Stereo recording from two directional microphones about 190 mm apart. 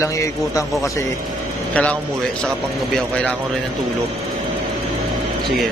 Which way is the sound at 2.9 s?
5° left (ahead or behind).